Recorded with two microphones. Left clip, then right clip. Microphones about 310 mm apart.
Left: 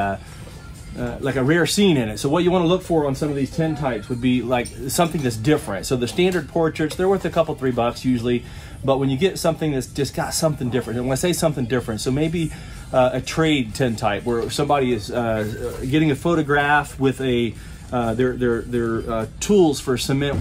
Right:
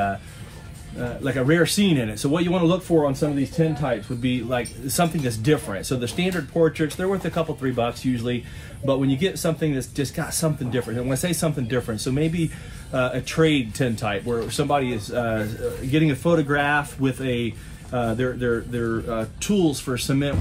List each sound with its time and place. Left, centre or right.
1.2 s speech: centre
4.2 s speech: centre